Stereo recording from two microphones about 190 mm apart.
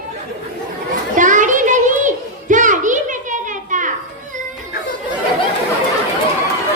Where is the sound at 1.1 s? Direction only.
40° right (ahead or behind).